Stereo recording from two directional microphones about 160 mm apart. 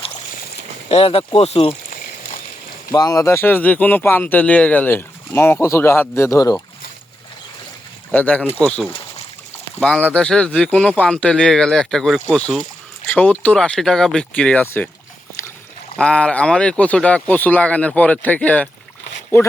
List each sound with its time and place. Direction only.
0.9 s speech: 35° left (ahead or behind)
2.9 s speech: 20° left (ahead or behind)
8.1 s speech: 10° left (ahead or behind)
16.0 s speech: 5° left (ahead or behind)